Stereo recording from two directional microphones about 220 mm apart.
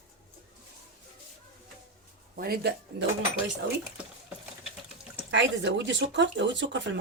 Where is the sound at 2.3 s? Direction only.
45° right (ahead or behind).